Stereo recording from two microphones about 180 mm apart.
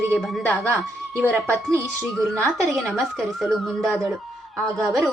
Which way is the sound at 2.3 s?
15° right (ahead or behind).